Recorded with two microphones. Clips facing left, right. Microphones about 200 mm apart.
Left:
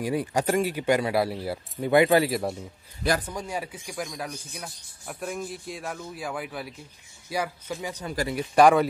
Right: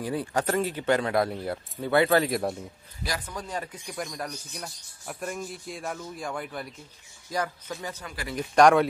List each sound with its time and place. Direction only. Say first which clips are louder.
0.0 s speech: left 2 dB; 10° left (ahead or behind)
3.3 s speech: left 2 dB; 10° left (ahead or behind)
8.0 s speech: left 9 dB; 35° left (ahead or behind)
8.4 s speech: even; 5° left (ahead or behind)